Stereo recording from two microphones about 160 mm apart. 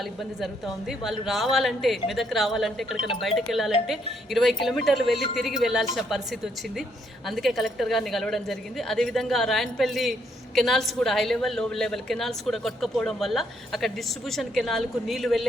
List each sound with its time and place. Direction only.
0.0 s a woman's voice: centre (ahead or behind)